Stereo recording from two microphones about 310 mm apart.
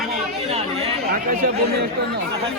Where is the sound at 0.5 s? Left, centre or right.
Centre.